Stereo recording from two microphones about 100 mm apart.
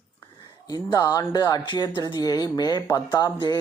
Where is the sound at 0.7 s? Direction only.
40° left (ahead or behind).